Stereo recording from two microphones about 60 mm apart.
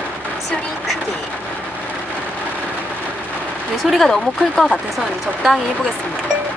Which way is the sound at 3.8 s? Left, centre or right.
Centre.